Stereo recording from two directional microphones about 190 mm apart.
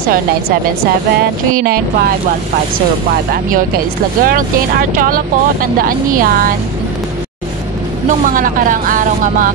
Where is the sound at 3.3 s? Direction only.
50° right (ahead or behind).